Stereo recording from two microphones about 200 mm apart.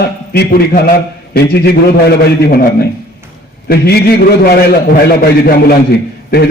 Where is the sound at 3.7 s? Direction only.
55° left (ahead or behind).